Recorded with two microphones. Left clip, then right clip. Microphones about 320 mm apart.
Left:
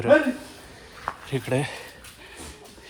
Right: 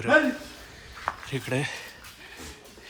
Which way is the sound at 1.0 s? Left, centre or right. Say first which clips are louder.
Left 2 dB; centre.